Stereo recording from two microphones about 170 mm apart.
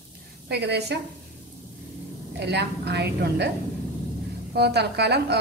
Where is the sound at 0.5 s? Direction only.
75° right (ahead or behind).